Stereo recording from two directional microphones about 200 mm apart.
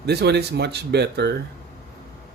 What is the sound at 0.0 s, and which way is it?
Speech, 55° right (ahead or behind).